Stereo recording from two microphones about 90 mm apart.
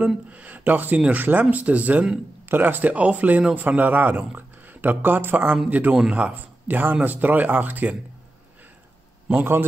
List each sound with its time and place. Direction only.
0.0 s speech: 15° right (ahead or behind)
9.3 s speech: 25° right (ahead or behind)